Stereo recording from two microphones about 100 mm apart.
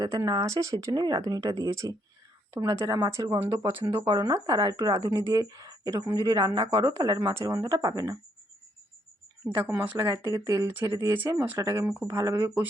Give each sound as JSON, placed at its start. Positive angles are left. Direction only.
{"t": 0.0, "sound": "speech", "side_deg": -45}
{"t": 0.9, "sound": "speech", "side_deg": -45}
{"t": 9.6, "sound": "speech", "side_deg": -25}